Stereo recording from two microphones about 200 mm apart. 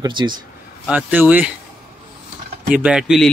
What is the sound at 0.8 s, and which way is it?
Speech, 10° right (ahead or behind).